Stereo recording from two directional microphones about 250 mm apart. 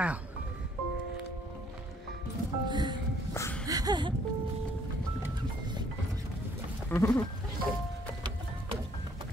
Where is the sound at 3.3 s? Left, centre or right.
Centre.